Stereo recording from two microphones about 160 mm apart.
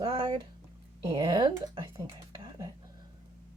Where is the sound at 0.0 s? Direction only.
25° right (ahead or behind).